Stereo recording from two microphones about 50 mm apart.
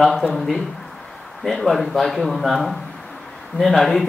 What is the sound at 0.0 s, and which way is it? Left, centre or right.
Speech, centre.